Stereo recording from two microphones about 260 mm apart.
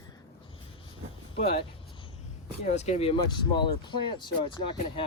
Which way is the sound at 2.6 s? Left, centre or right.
Left.